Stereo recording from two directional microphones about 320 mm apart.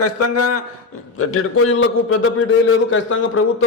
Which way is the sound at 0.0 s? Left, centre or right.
Left.